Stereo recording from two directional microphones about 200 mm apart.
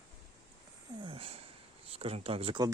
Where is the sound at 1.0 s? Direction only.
25° right (ahead or behind).